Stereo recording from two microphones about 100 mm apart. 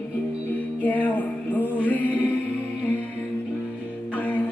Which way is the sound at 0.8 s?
15° left (ahead or behind).